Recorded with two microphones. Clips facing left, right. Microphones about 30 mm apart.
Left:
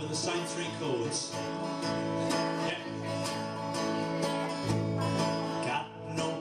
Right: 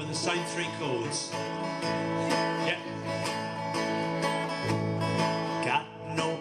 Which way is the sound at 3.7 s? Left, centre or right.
Right.